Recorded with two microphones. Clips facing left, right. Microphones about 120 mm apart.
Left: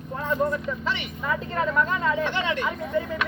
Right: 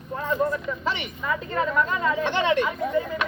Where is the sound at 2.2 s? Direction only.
25° right (ahead or behind).